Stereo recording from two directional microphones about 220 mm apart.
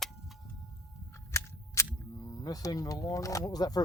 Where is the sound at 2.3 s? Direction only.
15° left (ahead or behind).